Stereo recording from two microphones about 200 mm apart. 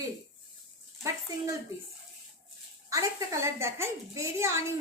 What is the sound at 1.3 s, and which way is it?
Speech, 15° right (ahead or behind).